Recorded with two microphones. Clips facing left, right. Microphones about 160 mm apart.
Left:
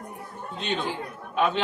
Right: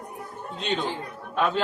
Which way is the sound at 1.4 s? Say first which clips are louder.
Even; centre (ahead or behind).